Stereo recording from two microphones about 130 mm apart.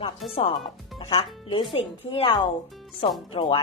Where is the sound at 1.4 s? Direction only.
35° left (ahead or behind).